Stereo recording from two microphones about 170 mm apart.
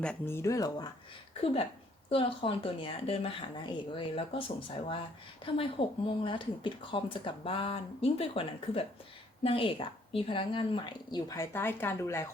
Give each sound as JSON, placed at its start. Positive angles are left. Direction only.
{"t": 0.0, "sound": "speech", "side_deg": 10}
{"t": 2.0, "sound": "a woman's voice", "side_deg": 30}